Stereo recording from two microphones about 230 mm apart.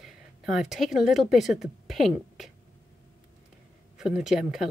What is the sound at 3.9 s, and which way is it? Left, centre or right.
Speech, centre.